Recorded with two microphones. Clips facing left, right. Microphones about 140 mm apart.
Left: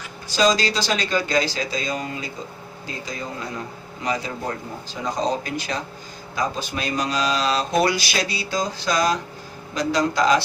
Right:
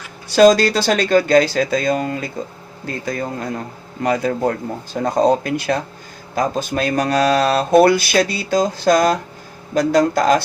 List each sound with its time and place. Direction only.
0.3 s speech: 55° right (ahead or behind)